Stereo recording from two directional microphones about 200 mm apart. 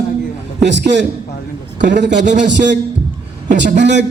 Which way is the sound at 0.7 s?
60° right (ahead or behind).